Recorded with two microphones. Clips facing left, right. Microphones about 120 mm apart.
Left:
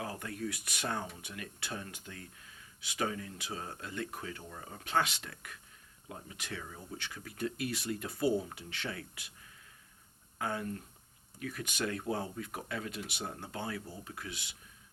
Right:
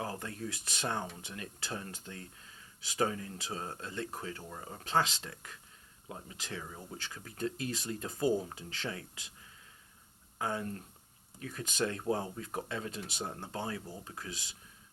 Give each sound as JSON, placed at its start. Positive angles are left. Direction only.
{"t": 0.0, "sound": "speech", "side_deg": -30}
{"t": 10.3, "sound": "speech", "side_deg": -30}